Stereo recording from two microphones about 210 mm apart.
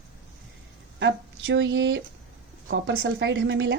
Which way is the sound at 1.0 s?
60° right (ahead or behind).